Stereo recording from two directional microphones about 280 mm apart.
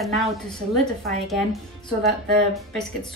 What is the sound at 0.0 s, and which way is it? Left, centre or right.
A woman's voice, centre.